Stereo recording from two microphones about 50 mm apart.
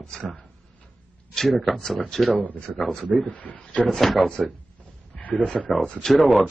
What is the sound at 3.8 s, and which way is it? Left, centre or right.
Speech, centre.